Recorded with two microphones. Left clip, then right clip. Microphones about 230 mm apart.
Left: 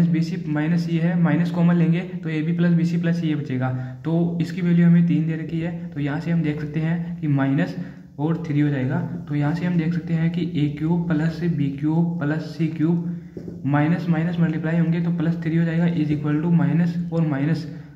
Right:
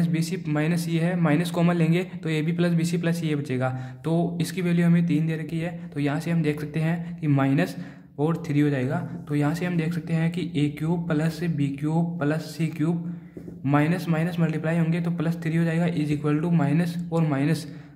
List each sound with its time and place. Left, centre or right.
0.1 s speech: right